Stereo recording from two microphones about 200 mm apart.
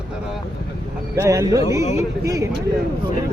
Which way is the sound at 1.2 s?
15° right (ahead or behind).